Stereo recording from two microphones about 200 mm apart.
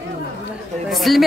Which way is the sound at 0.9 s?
Centre (ahead or behind).